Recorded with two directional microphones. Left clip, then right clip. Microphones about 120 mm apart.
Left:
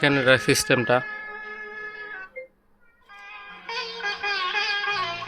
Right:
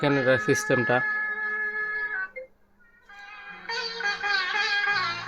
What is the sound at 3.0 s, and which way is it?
Music, 40° left (ahead or behind).